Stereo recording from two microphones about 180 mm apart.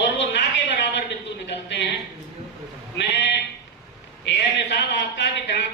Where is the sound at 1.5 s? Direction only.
75° left (ahead or behind).